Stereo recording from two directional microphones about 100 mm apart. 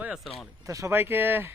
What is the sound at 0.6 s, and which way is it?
Speech, 35° right (ahead or behind).